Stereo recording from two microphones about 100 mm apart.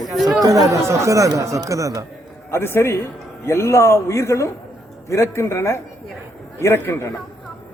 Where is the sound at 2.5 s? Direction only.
25° left (ahead or behind).